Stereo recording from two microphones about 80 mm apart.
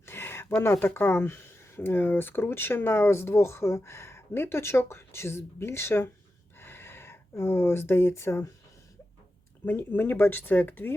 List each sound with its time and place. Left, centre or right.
0.0 s speech: left
6.6 s a sound: left
9.6 s speech: left